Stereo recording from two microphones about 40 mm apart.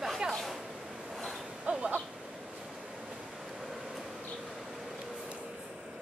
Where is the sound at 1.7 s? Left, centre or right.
Right.